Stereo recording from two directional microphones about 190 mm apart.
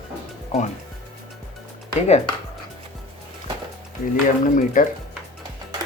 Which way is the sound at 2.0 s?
35° left (ahead or behind).